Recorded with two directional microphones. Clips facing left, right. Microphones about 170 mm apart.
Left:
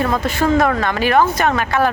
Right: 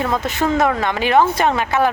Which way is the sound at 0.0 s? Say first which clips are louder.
Left 2 dB; 20° right (ahead or behind).